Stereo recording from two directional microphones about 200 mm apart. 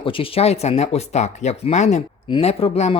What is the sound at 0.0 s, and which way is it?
Speech, 25° left (ahead or behind).